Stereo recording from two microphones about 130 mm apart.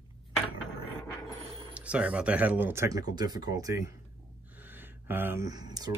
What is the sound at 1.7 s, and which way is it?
Speech, 10° right (ahead or behind).